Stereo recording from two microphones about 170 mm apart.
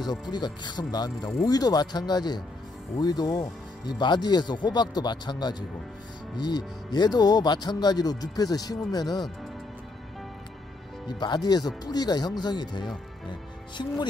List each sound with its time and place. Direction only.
0.3 s speech: 25° left (ahead or behind)
11.1 s speech: 25° left (ahead or behind)